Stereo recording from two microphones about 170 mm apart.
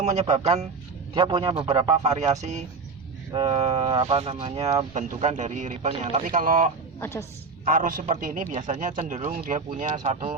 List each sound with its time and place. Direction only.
0.0 s a man's voice: 45° right (ahead or behind)
1.1 s speech: 30° right (ahead or behind)
1.9 s a man's voice: 40° right (ahead or behind)
3.3 s speech: 30° right (ahead or behind)
4.9 s a man's voice: 45° right (ahead or behind)
7.0 s a woman's voice: 15° left (ahead or behind)
7.6 s a man's voice: 50° right (ahead or behind)